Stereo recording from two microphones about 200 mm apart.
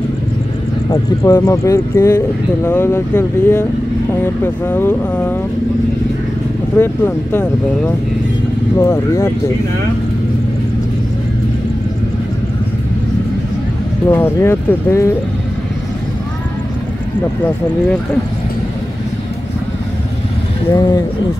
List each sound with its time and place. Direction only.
1.2 s speech: 15° left (ahead or behind)
6.8 s speech: 10° left (ahead or behind)
14.0 s speech: 10° left (ahead or behind)
20.7 s speech: 15° left (ahead or behind)